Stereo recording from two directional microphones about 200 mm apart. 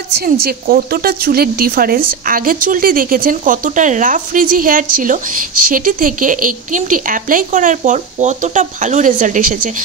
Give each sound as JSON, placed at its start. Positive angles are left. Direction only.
{"t": 0.2, "sound": "a woman's voice", "side_deg": -50}